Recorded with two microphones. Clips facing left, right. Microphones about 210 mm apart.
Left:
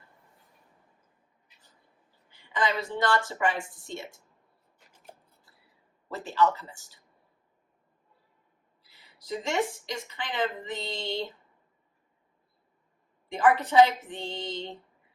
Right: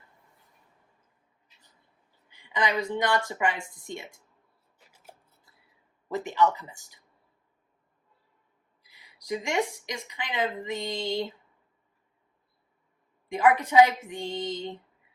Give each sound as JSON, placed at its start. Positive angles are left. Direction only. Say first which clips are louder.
{"t": 2.6, "sound": "a woman's voice", "louder": "right 1 dB", "side_deg": -20}
{"t": 4.9, "sound": "a sound", "louder": "left 2 dB", "side_deg": -10}
{"t": 6.1, "sound": "a woman's voice", "louder": "right 1 dB", "side_deg": -15}
{"t": 8.8, "sound": "a sound", "louder": "left 1 dB", "side_deg": -15}
{"t": 10.1, "sound": "a woman's voice", "louder": "right 1 dB", "side_deg": -10}
{"t": 13.2, "sound": "a woman's voice", "louder": "right 1 dB", "side_deg": -10}